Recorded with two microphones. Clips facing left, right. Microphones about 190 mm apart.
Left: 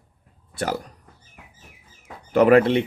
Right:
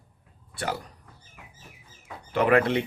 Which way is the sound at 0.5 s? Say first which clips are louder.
Left 5 dB; 40° left (ahead or behind).